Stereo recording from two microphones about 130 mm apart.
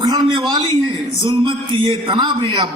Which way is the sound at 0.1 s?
30° right (ahead or behind).